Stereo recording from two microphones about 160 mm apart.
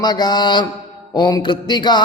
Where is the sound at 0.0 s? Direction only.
25° left (ahead or behind).